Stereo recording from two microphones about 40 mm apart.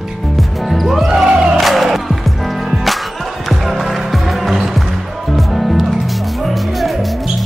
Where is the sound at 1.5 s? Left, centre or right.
Centre.